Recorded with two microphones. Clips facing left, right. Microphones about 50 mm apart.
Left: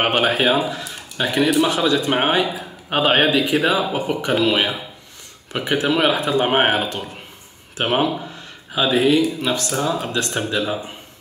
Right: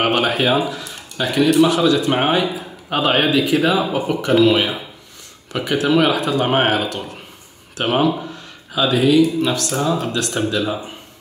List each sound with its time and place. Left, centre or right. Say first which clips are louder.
0.0 s a sound: right 1 dB; centre
0.3 s speech: even; centre
1.7 s speech: right 2 dB; left
5.5 s speech: right 2 dB; centre
6.1 s speech: even; left
9.7 s speech: right 2 dB; centre
10.1 s speech: right 2 dB; left